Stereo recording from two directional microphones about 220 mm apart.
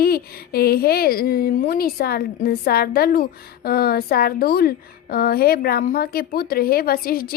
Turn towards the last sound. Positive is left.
turn(degrees=40)  # may be behind; listen again after turning